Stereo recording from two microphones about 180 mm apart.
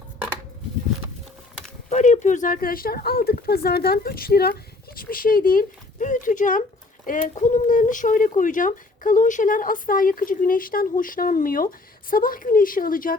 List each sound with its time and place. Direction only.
1.9 s speech: 40° left (ahead or behind)